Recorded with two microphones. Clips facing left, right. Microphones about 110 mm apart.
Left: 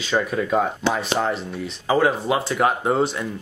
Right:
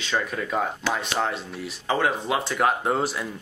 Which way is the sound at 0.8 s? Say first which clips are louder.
Left 4 dB; 25° left (ahead or behind).